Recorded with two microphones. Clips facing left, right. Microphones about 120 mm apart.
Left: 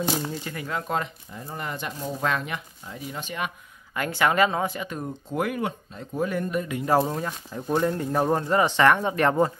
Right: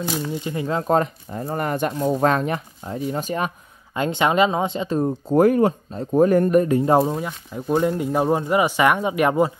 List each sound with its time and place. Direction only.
0.3 s speech: 20° right (ahead or behind); by 1.4 s 40° right (ahead or behind)
1.4 s speech: 55° right (ahead or behind)
3.9 s speech: 25° right (ahead or behind); by 6.8 s 45° right (ahead or behind)
7.0 s speech: 10° right (ahead or behind)